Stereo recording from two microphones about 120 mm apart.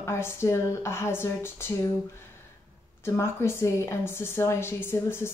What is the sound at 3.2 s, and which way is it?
A woman's voice, 20° left (ahead or behind).